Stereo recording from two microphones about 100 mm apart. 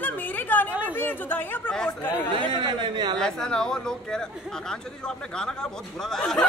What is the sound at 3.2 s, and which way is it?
Speech, 5° left (ahead or behind).